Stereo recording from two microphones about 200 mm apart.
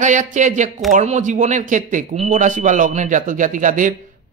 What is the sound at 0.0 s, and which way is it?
A woman's voice, 35° right (ahead or behind).